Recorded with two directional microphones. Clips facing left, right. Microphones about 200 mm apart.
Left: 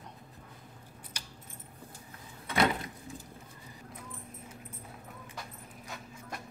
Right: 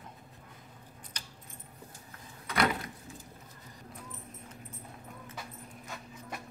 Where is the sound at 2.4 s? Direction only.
25° left (ahead or behind).